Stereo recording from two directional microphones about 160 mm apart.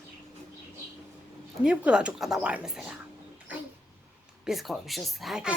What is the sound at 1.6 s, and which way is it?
A child's voice, 5° right (ahead or behind).